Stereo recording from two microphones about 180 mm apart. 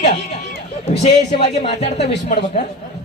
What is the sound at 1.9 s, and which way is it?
Speech, 70° left (ahead or behind).